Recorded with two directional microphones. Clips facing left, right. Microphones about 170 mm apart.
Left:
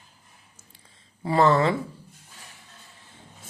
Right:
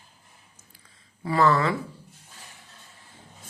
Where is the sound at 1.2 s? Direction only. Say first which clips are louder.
Left 2 dB; 25° left (ahead or behind).